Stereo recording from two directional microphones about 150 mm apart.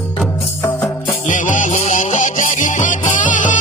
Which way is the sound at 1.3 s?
60° left (ahead or behind).